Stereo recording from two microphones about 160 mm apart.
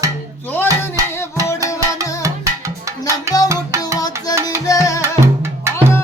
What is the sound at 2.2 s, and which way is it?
Music, 20° right (ahead or behind).